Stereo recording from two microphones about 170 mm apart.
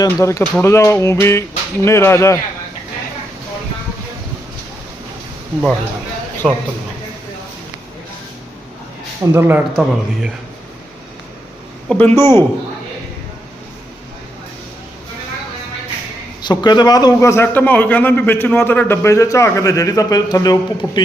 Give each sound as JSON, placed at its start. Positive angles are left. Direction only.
{"t": 0.0, "sound": "a man's voice", "side_deg": 20}
{"t": 6.4, "sound": "a man's voice", "side_deg": 5}
{"t": 9.3, "sound": "speech", "side_deg": -15}
{"t": 11.9, "sound": "a man's voice", "side_deg": 10}
{"t": 16.5, "sound": "a man's voice", "side_deg": 25}